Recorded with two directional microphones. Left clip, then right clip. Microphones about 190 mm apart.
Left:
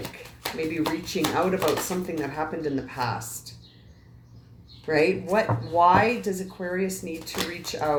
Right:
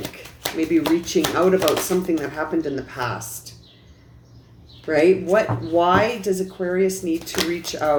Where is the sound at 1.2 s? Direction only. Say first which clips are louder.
Right 4 dB; 40° right (ahead or behind).